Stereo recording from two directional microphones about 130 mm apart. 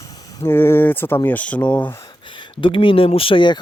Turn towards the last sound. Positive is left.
turn(degrees=40)  # may be behind; listen again after turning